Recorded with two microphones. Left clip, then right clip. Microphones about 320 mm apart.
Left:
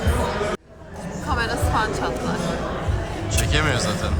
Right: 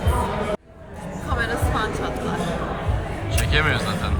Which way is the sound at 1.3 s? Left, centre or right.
Centre.